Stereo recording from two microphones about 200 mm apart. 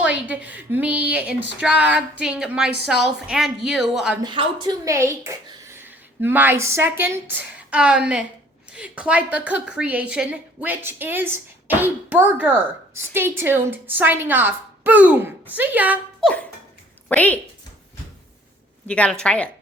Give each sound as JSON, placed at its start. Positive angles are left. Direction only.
{"t": 0.0, "sound": "a woman's voice", "side_deg": -5}
{"t": 4.2, "sound": "a woman's voice", "side_deg": -25}
{"t": 17.1, "sound": "a woman's voice", "side_deg": 10}
{"t": 18.9, "sound": "a woman's voice", "side_deg": 5}